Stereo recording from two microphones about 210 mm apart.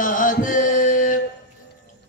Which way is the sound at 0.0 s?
40° left (ahead or behind).